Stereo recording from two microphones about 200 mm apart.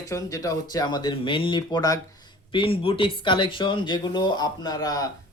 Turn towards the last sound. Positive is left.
turn(degrees=20)  # may be behind; listen again after turning